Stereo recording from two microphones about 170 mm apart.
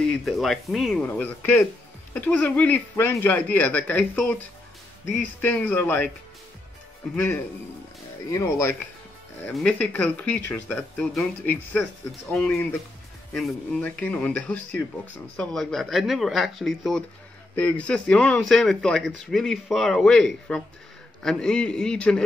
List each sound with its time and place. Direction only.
0.0 s a man's voice: 5° left (ahead or behind)
5.4 s speech: 10° left (ahead or behind)
8.3 s speech: 15° left (ahead or behind)
9.5 s a man's voice: 5° left (ahead or behind)